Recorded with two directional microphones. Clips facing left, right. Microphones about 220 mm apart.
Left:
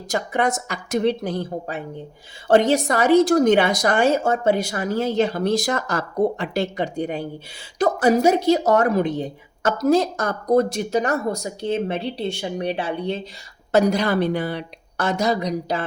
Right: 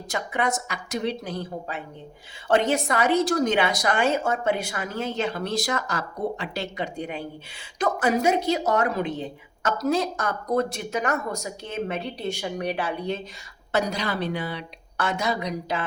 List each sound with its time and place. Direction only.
0.1 s a woman's voice: 45° left (ahead or behind); by 13.1 s 30° left (ahead or behind)
13.7 s a woman's voice: 50° left (ahead or behind)